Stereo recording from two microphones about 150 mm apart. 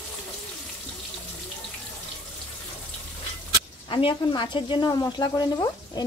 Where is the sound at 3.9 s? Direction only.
30° left (ahead or behind).